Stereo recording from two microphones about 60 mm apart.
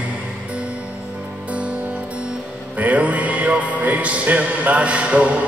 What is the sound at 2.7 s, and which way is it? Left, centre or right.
Music, right.